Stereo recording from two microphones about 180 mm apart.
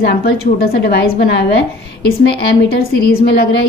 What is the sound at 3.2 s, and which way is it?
Speech, 70° left (ahead or behind).